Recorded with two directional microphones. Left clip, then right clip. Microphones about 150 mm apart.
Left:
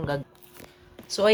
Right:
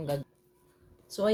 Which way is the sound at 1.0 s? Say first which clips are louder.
Left 7 dB; 30° right (ahead or behind).